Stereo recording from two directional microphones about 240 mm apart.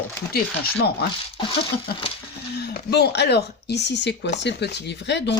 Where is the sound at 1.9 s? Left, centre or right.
Left.